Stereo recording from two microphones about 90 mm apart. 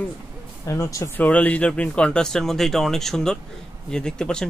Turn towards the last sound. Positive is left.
turn(degrees=10)  # may be behind; listen again after turning